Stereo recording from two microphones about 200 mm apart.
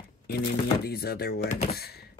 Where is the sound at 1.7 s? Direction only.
50° left (ahead or behind).